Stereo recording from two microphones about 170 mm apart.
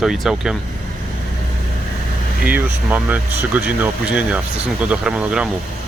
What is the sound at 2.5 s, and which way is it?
Speech, 10° right (ahead or behind).